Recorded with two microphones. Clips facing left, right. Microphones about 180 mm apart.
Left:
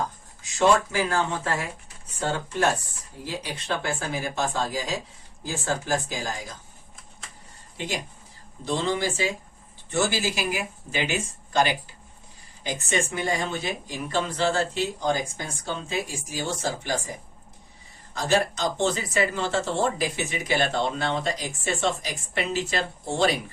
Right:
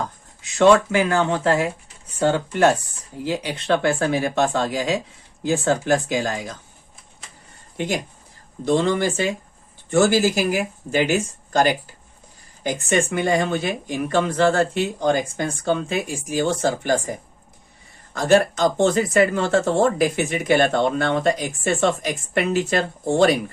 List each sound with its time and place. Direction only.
0.6 s speech: 70° right (ahead or behind)
7.8 s speech: 50° right (ahead or behind)
9.9 s speech: 45° right (ahead or behind)
13.1 s speech: 60° right (ahead or behind)